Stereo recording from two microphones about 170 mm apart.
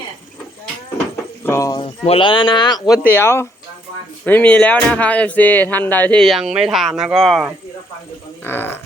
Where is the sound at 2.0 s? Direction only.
30° left (ahead or behind); by 7.5 s centre (ahead or behind).